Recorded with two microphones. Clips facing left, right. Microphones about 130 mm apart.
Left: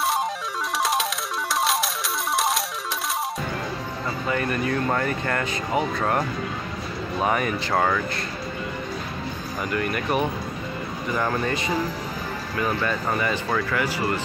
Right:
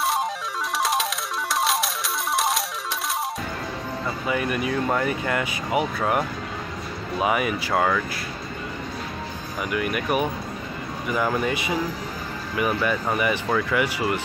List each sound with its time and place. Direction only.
1.5 s music: centre (ahead or behind)
4.3 s speech: 10° right (ahead or behind)
9.7 s speech: 10° right (ahead or behind)